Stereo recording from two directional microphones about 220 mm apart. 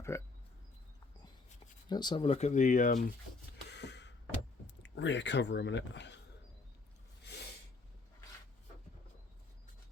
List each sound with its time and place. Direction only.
0.1 s speech: 10° left (ahead or behind)
1.9 s speech: 20° left (ahead or behind); by 3.1 s 35° left (ahead or behind)
3.7 s a sound: 50° left (ahead or behind)
4.6 s speech: 55° left (ahead or behind)